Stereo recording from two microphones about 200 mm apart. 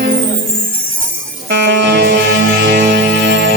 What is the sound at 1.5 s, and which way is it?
Music, 60° right (ahead or behind).